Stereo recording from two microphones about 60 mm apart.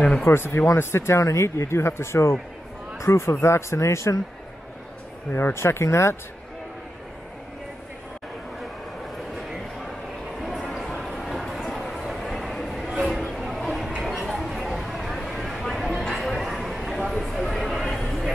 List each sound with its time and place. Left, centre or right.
0.2 s speech: left
5.3 s speech: left
10.7 s a sound: centre